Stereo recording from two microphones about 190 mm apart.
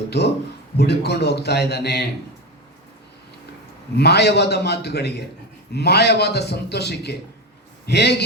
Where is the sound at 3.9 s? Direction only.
60° left (ahead or behind).